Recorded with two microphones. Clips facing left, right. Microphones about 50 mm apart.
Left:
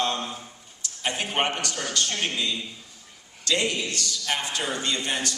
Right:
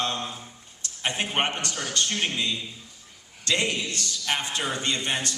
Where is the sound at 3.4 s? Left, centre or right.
Right.